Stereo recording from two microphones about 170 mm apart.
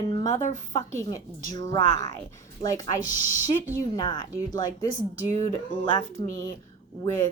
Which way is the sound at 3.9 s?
25° left (ahead or behind).